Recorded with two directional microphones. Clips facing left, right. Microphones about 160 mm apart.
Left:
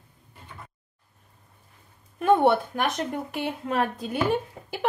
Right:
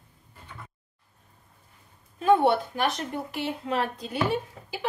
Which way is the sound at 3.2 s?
55° left (ahead or behind).